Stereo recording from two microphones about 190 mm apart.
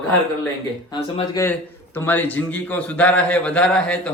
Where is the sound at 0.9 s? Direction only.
20° left (ahead or behind).